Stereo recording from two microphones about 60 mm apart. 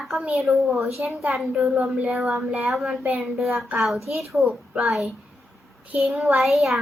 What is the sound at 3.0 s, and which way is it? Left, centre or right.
Speech, right.